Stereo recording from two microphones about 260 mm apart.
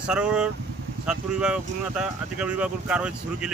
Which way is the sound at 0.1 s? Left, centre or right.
Centre.